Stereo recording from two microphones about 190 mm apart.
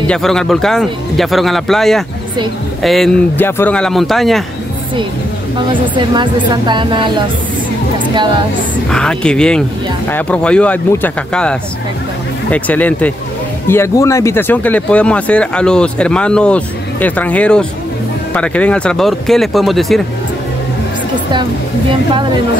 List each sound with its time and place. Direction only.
0.1 s speech: 5° left (ahead or behind)
5.7 s speech: 25° right (ahead or behind)
8.9 s speech: 5° left (ahead or behind)